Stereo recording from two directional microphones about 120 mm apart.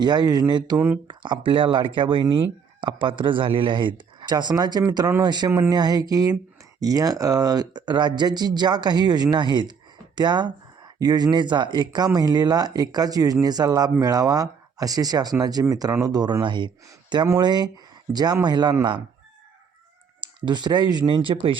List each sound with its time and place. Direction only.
0.0 s speech: 35° right (ahead or behind)
5.5 s a sound: 25° right (ahead or behind)
6.7 s speech: 30° right (ahead or behind)
20.2 s speech: 40° right (ahead or behind)